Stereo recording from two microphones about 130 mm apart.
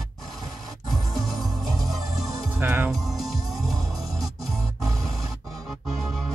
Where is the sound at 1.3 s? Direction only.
30° right (ahead or behind).